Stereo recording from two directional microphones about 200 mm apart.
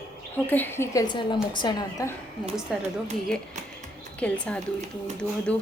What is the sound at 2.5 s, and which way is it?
Speech, 5° right (ahead or behind).